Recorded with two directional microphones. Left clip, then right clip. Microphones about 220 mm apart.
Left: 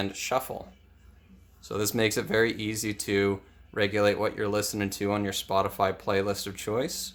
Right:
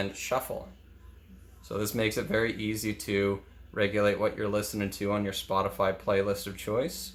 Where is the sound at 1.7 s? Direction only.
40° left (ahead or behind).